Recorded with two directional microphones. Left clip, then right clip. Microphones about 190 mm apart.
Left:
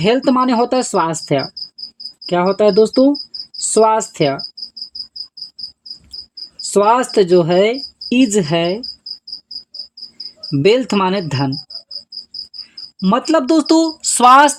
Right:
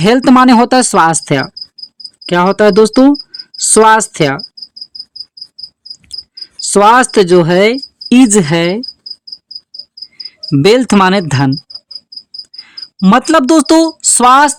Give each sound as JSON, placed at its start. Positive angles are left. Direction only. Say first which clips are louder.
{"t": 0.0, "sound": "speech", "louder": "right 7 dB", "side_deg": -55}
{"t": 6.7, "sound": "speech", "louder": "right 6 dB", "side_deg": -55}
{"t": 10.5, "sound": "speech", "louder": "right 5 dB", "side_deg": -50}
{"t": 13.0, "sound": "speech", "louder": "right 6 dB", "side_deg": -55}